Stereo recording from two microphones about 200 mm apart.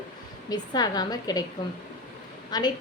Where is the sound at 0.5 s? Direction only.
20° left (ahead or behind).